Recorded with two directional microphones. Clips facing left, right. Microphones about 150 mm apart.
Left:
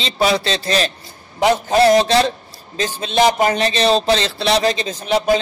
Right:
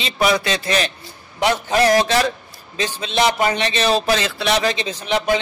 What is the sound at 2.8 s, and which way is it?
Speech, 45° left (ahead or behind).